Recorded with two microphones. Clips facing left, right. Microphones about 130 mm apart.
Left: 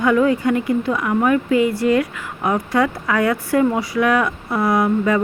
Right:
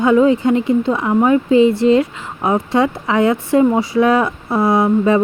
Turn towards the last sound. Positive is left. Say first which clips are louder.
# right 4 dB
turn(degrees=-25)  # may be behind; listen again after turning